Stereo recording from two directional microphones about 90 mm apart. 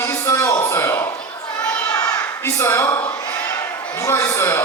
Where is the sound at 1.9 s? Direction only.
40° left (ahead or behind).